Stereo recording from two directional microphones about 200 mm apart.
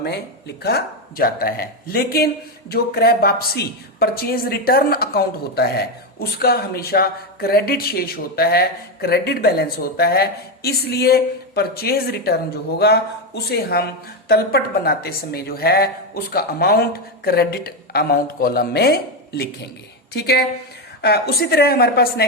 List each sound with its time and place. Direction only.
0.0 s speech: 55° left (ahead or behind)